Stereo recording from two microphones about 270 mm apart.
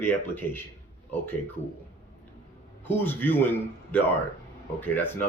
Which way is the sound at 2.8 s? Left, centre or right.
Centre.